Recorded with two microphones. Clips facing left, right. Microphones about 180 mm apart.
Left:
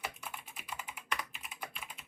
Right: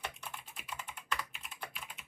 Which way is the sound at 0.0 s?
5° left (ahead or behind).